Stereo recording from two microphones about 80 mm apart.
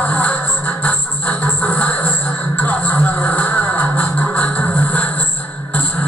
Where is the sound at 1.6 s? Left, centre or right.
Centre.